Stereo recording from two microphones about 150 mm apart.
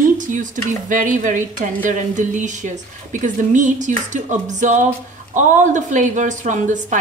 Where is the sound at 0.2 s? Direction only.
55° right (ahead or behind).